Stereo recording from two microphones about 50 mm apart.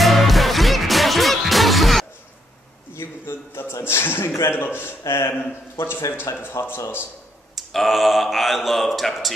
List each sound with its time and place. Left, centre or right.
0.0 s music: centre
2.9 s a sound: left
3.8 s a man's voice: left
6.6 s a man's voice: left
7.5 s speech: centre